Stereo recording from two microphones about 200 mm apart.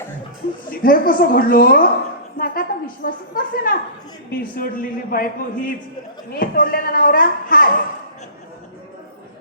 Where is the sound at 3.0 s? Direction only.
45° left (ahead or behind).